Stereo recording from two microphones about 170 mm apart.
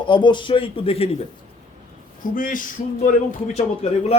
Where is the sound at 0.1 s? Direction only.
30° left (ahead or behind).